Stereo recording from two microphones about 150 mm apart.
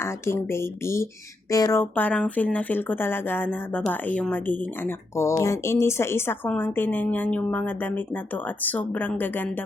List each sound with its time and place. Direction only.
0.0 s speech: 15° left (ahead or behind)
1.8 s speech: 10° left (ahead or behind)